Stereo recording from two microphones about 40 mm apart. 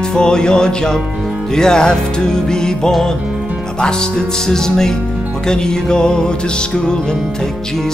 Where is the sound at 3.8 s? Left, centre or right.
Centre.